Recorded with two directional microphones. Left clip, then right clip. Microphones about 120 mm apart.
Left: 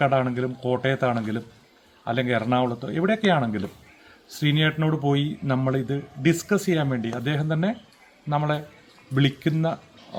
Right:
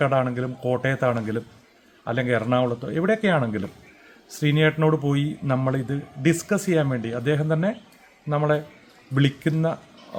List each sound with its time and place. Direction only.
0.0 s speech: 25° right (ahead or behind)